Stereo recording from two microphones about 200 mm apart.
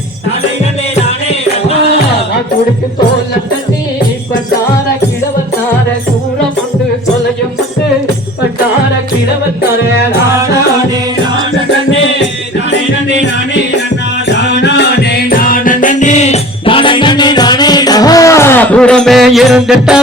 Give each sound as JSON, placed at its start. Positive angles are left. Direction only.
{"t": 14.6, "sound": "music", "side_deg": 55}